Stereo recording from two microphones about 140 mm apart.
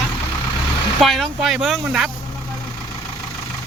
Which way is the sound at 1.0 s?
Centre (ahead or behind).